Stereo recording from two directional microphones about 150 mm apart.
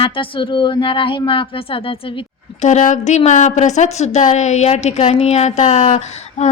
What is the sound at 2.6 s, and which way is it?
Female singing, 50° left (ahead or behind).